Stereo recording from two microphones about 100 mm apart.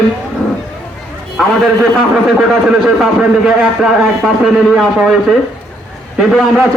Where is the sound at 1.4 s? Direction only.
Centre (ahead or behind).